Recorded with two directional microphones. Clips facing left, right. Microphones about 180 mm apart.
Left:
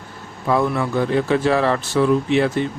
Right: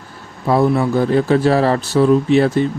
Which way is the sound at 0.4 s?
35° right (ahead or behind).